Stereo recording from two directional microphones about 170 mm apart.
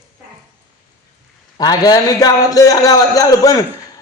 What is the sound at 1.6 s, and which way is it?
A man's voice, 25° left (ahead or behind).